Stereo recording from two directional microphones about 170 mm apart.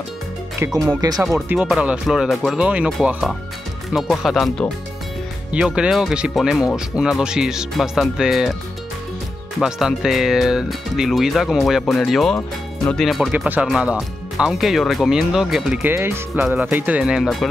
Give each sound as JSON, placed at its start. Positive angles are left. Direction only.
{"t": 0.7, "sound": "speech", "side_deg": -20}
{"t": 9.6, "sound": "speech", "side_deg": -5}
{"t": 15.9, "sound": "speech", "side_deg": -15}